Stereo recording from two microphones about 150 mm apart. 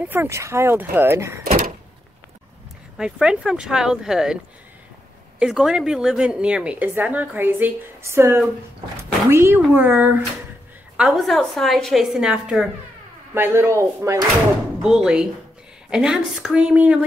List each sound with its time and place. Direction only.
0.1 s a woman's voice: 15° right (ahead or behind)
3.0 s a woman's voice: 5° right (ahead or behind)
5.4 s a woman's voice: 5° right (ahead or behind)
11.0 s a woman's voice: centre (ahead or behind)
13.3 s a woman's voice: 15° right (ahead or behind)
14.8 s a woman's voice: 5° right (ahead or behind)